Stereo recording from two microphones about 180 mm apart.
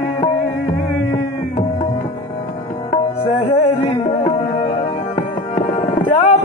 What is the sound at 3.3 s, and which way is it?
Music, 30° left (ahead or behind).